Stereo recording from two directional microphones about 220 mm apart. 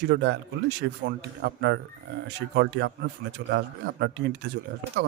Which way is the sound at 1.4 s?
50° right (ahead or behind).